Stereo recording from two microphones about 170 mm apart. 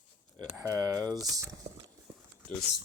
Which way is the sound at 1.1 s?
Centre (ahead or behind).